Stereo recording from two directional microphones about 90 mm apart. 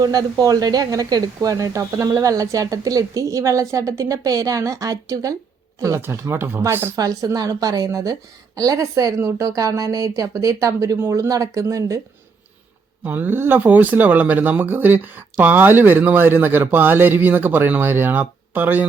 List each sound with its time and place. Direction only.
0.0 s speech: 45° right (ahead or behind); by 6.9 s 25° right (ahead or behind)
6.9 s speech: 40° right (ahead or behind)
13.1 s speech: 20° right (ahead or behind)